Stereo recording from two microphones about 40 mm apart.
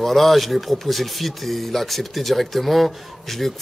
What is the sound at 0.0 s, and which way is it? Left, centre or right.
Speech, centre.